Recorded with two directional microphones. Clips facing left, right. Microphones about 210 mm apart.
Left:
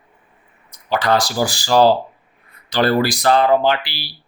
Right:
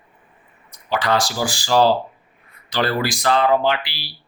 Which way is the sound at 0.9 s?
40° left (ahead or behind).